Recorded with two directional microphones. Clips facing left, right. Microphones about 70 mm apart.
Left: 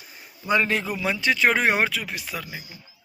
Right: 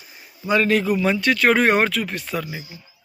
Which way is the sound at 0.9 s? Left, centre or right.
Centre.